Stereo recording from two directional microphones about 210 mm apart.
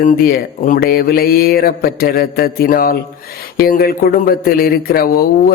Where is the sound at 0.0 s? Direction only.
45° left (ahead or behind).